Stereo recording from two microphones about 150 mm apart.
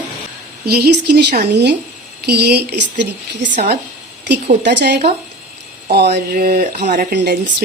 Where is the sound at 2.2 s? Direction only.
90° right.